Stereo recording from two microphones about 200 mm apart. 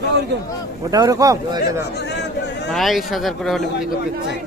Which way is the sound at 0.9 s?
15° right (ahead or behind).